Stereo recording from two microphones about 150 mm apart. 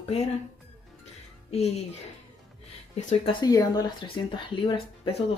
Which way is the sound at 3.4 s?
25° left (ahead or behind).